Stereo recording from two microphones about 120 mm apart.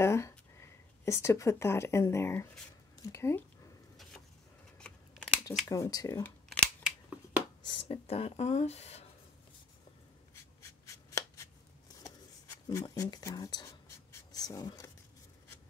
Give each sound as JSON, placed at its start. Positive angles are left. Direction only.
{"t": 0.0, "sound": "speech", "side_deg": 20}
{"t": 4.7, "sound": "scissors", "side_deg": 10}
{"t": 5.7, "sound": "speech", "side_deg": 30}
{"t": 6.8, "sound": "scissors", "side_deg": -10}
{"t": 7.7, "sound": "speech", "side_deg": 55}
{"t": 10.6, "sound": "a sound", "side_deg": 25}
{"t": 12.6, "sound": "speech", "side_deg": 30}
{"t": 13.8, "sound": "writing", "side_deg": 30}